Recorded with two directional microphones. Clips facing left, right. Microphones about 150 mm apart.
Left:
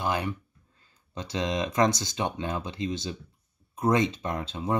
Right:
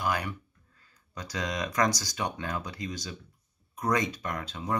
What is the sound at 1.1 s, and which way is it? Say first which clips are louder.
Speech: left 5 dB; 25° left (ahead or behind).